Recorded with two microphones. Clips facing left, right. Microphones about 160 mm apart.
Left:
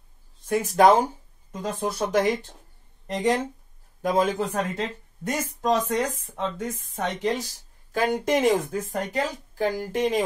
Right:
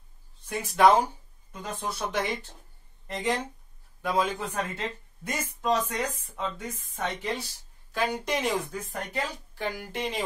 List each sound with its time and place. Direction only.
0.5 s speech: 45° left (ahead or behind)